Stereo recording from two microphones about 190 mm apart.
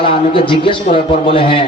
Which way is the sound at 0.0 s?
30° left (ahead or behind).